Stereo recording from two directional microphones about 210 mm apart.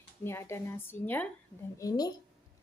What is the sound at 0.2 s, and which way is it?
A woman's voice, 10° left (ahead or behind).